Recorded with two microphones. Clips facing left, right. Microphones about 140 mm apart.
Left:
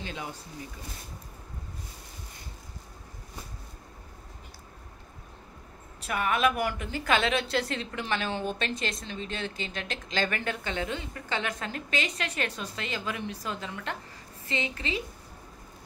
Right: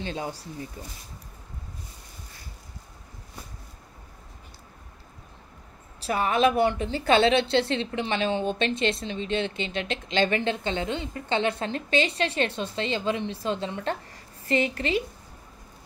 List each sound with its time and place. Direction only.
0.0 s speech: 30° right (ahead or behind)
5.9 s speech: 30° right (ahead or behind)